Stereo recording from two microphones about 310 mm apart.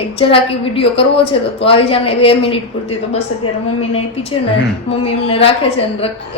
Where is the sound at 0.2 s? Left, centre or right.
Centre.